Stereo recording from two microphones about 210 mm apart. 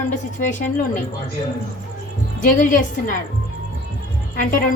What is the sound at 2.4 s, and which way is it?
Speech, 40° left (ahead or behind).